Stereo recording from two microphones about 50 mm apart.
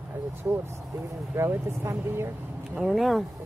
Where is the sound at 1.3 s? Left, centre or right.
Right.